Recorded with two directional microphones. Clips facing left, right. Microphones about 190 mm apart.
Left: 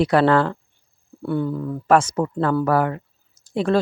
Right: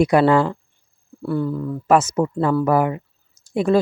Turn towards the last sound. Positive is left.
turn(degrees=-10)  # may be behind; listen again after turning